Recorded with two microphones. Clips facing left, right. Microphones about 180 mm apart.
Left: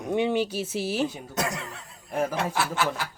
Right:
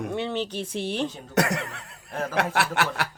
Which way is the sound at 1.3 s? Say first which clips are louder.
Right 9 dB; 65° right (ahead or behind).